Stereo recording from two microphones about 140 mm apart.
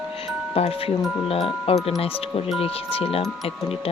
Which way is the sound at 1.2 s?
45° left (ahead or behind).